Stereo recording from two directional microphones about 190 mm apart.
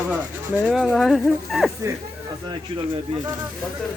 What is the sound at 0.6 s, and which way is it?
Speech, centre (ahead or behind).